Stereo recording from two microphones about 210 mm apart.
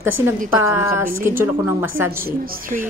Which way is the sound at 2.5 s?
40° right (ahead or behind).